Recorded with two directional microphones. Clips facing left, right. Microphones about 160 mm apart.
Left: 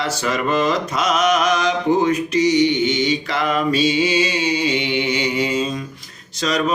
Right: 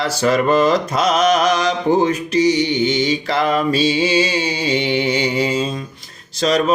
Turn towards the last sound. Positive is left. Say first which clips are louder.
# right 4 dB
turn(degrees=-35)  # may be behind; listen again after turning